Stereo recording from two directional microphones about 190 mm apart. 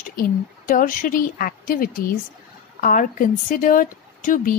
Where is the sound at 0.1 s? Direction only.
45° left (ahead or behind).